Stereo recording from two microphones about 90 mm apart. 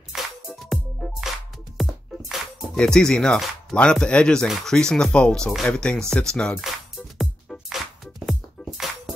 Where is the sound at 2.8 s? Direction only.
5° left (ahead or behind).